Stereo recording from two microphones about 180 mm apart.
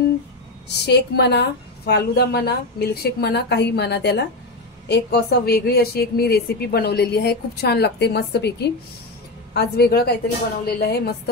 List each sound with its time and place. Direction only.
0.8 s a woman's voice: 65° left (ahead or behind)